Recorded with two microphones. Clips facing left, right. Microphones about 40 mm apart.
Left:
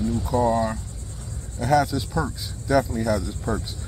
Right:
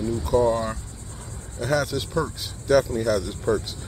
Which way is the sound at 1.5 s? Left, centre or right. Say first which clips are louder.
Left 3 dB; right.